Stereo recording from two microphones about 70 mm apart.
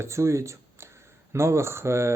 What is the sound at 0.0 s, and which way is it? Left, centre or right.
Speech, right.